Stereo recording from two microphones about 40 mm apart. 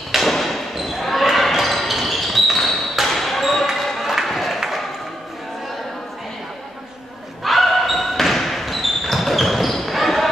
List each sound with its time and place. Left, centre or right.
0.1 s basketball bounce: centre
3.7 s a sound: centre
7.4 s basketball bounce: centre